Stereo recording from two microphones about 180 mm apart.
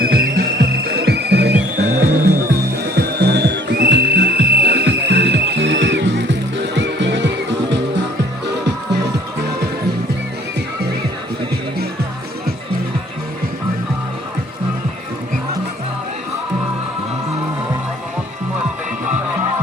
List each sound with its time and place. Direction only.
0.0 s music: 55° right (ahead or behind); by 7.8 s 75° right (ahead or behind)